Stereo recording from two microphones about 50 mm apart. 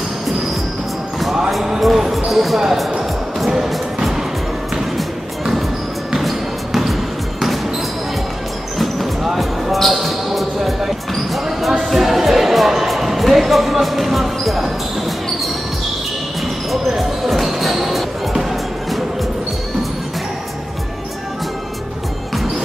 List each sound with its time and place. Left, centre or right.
1.5 s speech: centre
3.0 s music: centre
8.7 s basketball bounce: centre
11.8 s music: centre
16.8 s basketball bounce: centre